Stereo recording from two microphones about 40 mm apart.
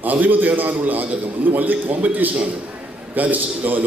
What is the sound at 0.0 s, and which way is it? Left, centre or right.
A man's voice, right.